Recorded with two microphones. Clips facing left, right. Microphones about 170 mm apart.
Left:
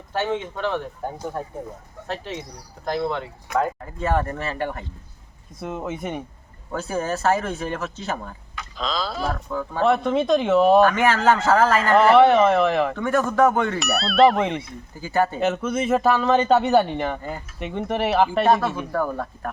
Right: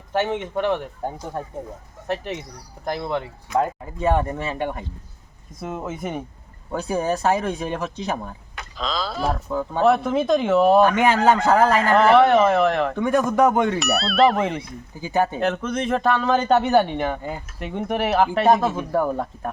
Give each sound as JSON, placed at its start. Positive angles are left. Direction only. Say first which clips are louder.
{"t": 0.1, "sound": "speech", "louder": "right 2 dB", "side_deg": -15}
{"t": 2.8, "sound": "speech", "louder": "left 1 dB", "side_deg": -15}
{"t": 5.5, "sound": "speech", "louder": "even", "side_deg": 0}
{"t": 6.7, "sound": "speech", "louder": "right 3 dB", "side_deg": -15}
{"t": 8.8, "sound": "speech", "louder": "right 1 dB", "side_deg": 0}
{"t": 9.5, "sound": "speech", "louder": "right 3 dB", "side_deg": -20}
{"t": 9.8, "sound": "speech", "louder": "right 1 dB", "side_deg": 0}
{"t": 10.8, "sound": "speech", "louder": "right 1 dB", "side_deg": -15}
{"t": 11.9, "sound": "speech", "louder": "left 1 dB", "side_deg": 0}
{"t": 13.0, "sound": "speech", "louder": "right 2 dB", "side_deg": -15}
{"t": 13.7, "sound": "speech", "louder": "left 1 dB", "side_deg": 0}
{"t": 15.0, "sound": "speech", "louder": "even", "side_deg": -15}
{"t": 15.4, "sound": "speech", "louder": "left 1 dB", "side_deg": 5}
{"t": 18.4, "sound": "speech", "louder": "right 2 dB", "side_deg": -20}